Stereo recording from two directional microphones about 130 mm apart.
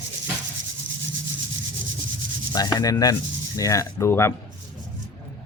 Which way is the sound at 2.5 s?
30° left (ahead or behind).